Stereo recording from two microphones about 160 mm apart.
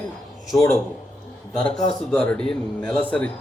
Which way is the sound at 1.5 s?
5° left (ahead or behind).